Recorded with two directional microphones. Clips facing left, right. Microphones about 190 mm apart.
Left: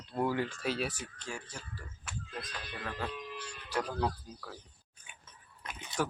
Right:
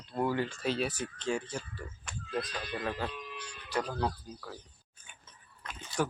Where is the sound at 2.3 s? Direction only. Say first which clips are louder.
Right 10 dB; 40° right (ahead or behind).